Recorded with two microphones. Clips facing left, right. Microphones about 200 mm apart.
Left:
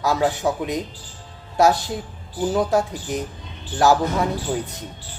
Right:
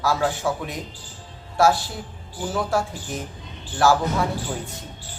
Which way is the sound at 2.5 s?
20° left (ahead or behind).